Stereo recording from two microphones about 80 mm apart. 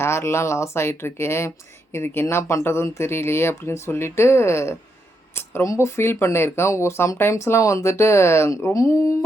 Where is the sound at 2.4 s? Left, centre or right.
Left.